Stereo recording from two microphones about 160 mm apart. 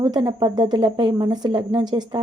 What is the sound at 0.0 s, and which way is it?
Speech, 30° right (ahead or behind).